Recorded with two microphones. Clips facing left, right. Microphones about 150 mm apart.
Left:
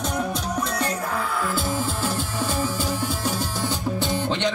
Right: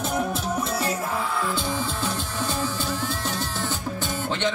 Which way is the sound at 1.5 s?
5° left (ahead or behind).